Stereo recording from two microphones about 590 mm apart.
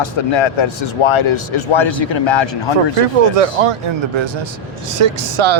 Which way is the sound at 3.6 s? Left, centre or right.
Right.